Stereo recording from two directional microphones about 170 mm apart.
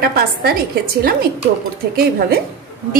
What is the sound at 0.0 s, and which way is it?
Speech, 65° right (ahead or behind).